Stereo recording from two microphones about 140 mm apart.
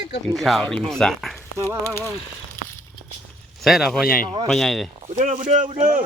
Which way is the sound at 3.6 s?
Centre (ahead or behind).